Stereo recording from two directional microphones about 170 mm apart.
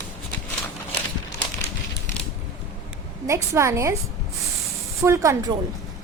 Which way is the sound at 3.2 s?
15° right (ahead or behind).